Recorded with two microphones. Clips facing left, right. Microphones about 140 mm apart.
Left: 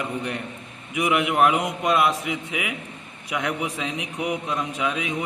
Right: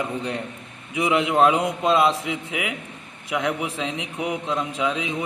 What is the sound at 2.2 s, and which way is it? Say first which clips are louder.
Speech: right 1 dB; 90° right.